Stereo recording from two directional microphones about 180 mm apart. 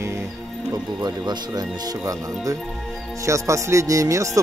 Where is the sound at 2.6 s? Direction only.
Centre (ahead or behind).